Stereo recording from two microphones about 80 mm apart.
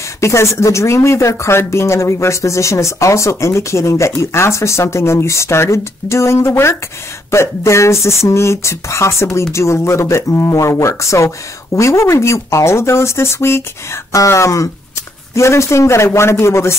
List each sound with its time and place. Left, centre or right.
0.2 s speech: left